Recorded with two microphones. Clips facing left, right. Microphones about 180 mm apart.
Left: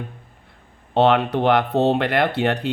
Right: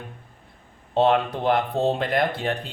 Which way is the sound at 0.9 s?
70° left (ahead or behind).